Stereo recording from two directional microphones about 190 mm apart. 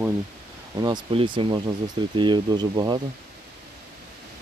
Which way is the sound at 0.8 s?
20° right (ahead or behind).